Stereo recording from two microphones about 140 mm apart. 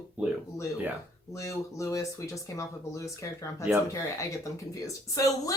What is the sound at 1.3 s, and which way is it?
Speech, 20° left (ahead or behind).